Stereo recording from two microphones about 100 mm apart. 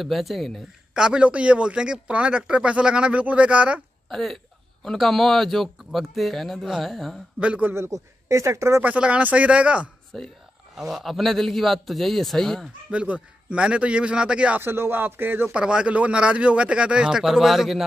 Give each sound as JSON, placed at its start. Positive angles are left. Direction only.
{"t": 0.0, "sound": "speech", "side_deg": 0}
{"t": 4.1, "sound": "a man's voice", "side_deg": 0}
{"t": 7.3, "sound": "speech", "side_deg": -15}
{"t": 7.7, "sound": "speech", "side_deg": -30}
{"t": 8.8, "sound": "speech", "side_deg": -10}
{"t": 10.1, "sound": "a man's voice", "side_deg": 0}
{"t": 12.9, "sound": "speech", "side_deg": -15}
{"t": 14.6, "sound": "speech", "side_deg": -25}
{"t": 15.5, "sound": "speech", "side_deg": -10}